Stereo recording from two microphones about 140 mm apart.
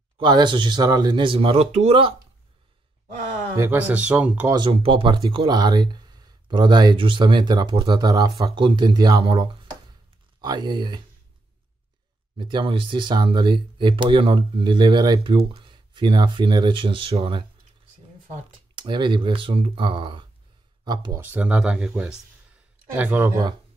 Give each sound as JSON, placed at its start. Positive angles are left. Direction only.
{"t": 0.2, "sound": "speech", "side_deg": -35}
{"t": 3.5, "sound": "speech", "side_deg": -15}
{"t": 4.5, "sound": "speech", "side_deg": -35}
{"t": 12.4, "sound": "speech", "side_deg": -35}
{"t": 18.8, "sound": "speech", "side_deg": -35}
{"t": 21.2, "sound": "speech", "side_deg": -10}
{"t": 22.5, "sound": "a sound", "side_deg": -10}